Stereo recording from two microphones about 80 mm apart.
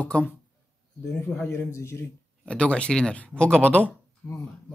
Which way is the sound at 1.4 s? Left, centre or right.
Left.